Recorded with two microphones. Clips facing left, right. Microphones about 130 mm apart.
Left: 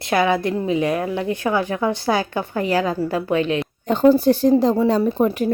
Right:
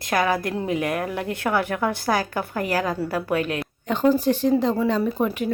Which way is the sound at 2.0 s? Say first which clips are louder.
Left 3 dB; 25° left (ahead or behind).